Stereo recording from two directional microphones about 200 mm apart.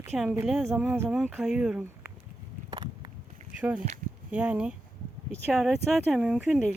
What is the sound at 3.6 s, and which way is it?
Speech, 5° right (ahead or behind).